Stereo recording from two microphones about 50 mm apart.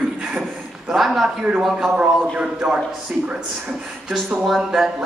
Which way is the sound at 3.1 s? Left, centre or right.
Right.